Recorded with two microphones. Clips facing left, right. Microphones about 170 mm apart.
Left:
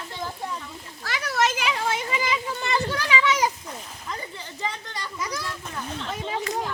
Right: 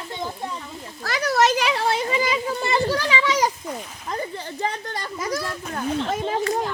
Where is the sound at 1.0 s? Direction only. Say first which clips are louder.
Right 5 dB; 40° right (ahead or behind).